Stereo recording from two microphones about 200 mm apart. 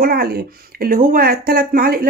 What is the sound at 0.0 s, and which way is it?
Speech, 50° right (ahead or behind).